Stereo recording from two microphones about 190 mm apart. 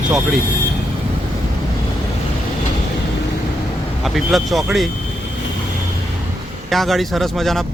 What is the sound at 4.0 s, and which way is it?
Speech, centre (ahead or behind).